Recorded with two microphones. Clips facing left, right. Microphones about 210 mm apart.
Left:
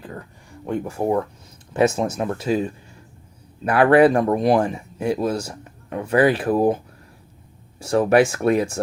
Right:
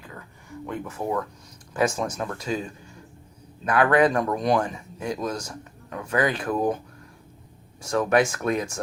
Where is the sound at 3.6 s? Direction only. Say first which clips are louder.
Left 6 dB; 30° left (ahead or behind).